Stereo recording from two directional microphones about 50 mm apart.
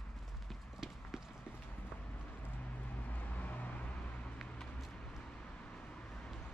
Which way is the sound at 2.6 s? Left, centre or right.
Left.